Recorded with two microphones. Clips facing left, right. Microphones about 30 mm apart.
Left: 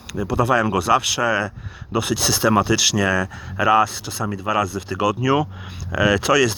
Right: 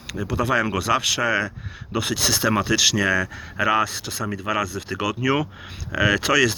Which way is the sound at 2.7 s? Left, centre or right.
Right.